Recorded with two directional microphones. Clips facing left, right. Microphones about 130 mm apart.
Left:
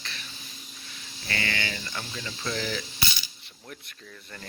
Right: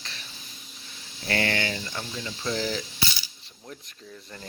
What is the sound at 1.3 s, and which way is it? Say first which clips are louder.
Speech: right 5 dB; 55° right (ahead or behind).